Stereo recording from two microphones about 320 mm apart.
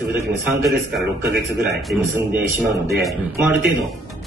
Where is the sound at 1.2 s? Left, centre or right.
Right.